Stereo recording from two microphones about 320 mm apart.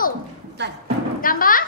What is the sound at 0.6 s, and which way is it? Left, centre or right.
Speech, right.